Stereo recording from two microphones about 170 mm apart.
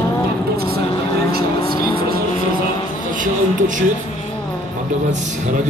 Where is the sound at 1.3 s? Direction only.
65° right (ahead or behind).